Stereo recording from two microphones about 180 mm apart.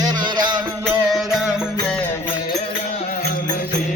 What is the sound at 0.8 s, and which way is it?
Music, centre (ahead or behind).